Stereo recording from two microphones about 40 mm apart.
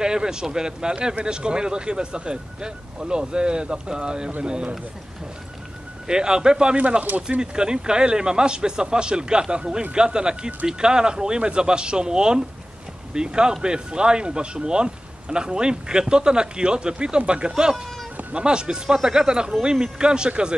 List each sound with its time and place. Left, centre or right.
0.0 s speech: centre
6.0 s speech: centre